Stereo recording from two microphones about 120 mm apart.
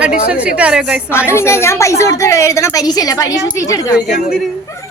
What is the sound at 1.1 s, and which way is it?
A woman's voice, 20° left (ahead or behind).